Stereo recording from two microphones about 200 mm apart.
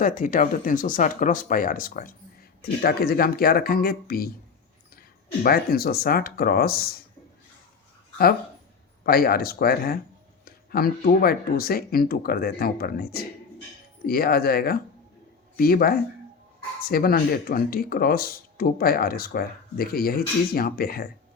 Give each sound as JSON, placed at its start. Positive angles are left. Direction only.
{"t": 0.0, "sound": "speech", "side_deg": 40}
{"t": 9.0, "sound": "speech", "side_deg": 50}
{"t": 14.1, "sound": "speech", "side_deg": 50}